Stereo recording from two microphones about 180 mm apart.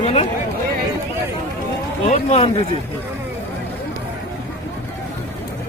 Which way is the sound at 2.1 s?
35° left (ahead or behind).